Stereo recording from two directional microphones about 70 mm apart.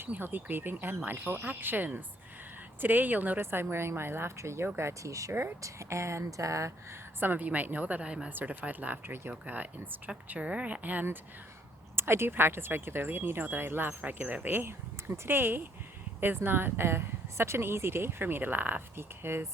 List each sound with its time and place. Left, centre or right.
0.0 s speech: right
5.3 s speech: right
5.6 s speech: right
7.2 s speech: right
8.3 s speech: right
11.9 s speech: right